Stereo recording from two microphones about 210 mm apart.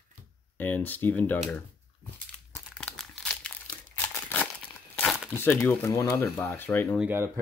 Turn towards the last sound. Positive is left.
turn(degrees=-10)  # may be behind; listen again after turning